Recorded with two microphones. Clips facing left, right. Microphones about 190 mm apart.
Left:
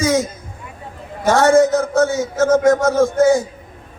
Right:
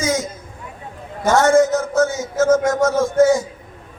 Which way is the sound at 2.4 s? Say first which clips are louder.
Left 2 dB; 60° left (ahead or behind).